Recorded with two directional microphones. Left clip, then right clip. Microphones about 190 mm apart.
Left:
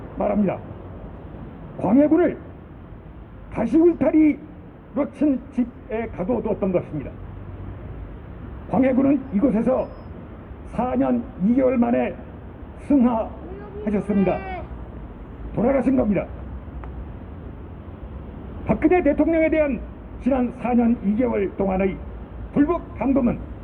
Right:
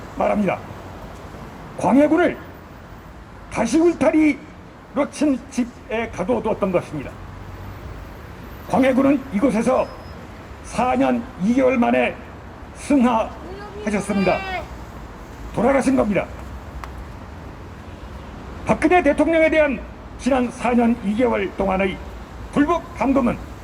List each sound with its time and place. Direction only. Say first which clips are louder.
0.2 s speech: right 3 dB; 70° right (ahead or behind)
1.8 s a man's voice: right 2 dB; 65° right (ahead or behind)
3.5 s a man's voice: even; 60° right (ahead or behind)
8.7 s a man's voice: right 3 dB; 65° right (ahead or behind)
12.9 s a man's voice: right 2 dB; 65° right (ahead or behind)
15.5 s a man's voice: right 3 dB; 65° right (ahead or behind)
18.6 s a man's voice: right 3 dB; 60° right (ahead or behind)